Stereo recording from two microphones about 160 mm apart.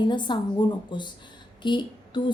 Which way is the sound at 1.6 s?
30° left (ahead or behind).